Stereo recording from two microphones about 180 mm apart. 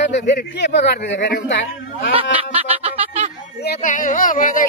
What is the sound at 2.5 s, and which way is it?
Music, 35° right (ahead or behind).